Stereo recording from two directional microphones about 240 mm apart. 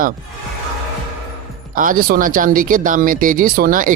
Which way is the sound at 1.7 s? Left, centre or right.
Right.